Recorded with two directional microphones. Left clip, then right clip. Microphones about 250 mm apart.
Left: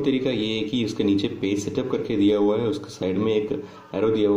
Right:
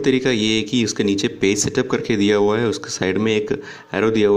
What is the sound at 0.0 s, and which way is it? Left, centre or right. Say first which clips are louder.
Speech: right 6 dB; right.